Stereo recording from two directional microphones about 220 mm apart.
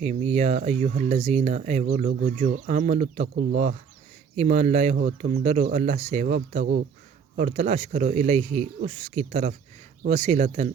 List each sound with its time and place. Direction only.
0.0 s speech: 30° right (ahead or behind)
4.4 s speech: 30° right (ahead or behind)